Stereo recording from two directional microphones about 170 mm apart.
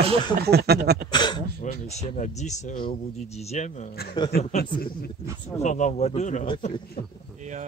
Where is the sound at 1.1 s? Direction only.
25° left (ahead or behind).